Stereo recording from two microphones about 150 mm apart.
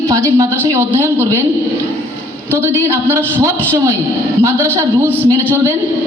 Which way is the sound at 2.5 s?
15° right (ahead or behind).